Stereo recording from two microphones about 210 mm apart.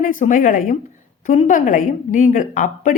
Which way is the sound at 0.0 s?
40° left (ahead or behind).